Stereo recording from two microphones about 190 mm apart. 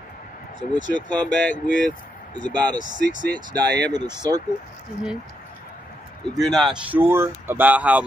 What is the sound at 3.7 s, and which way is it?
Speech, 65° right (ahead or behind).